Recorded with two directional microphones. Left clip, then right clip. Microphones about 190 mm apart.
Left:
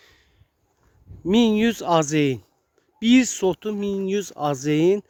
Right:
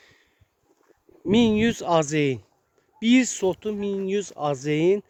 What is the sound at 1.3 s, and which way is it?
Speech, 30° left (ahead or behind).